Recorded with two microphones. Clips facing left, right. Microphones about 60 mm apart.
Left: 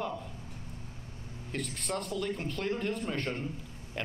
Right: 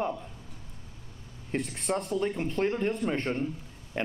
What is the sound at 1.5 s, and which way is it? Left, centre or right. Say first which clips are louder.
A man's voice: right 5 dB; right.